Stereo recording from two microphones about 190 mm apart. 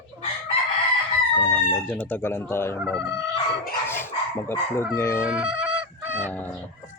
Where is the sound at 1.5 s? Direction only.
5° left (ahead or behind).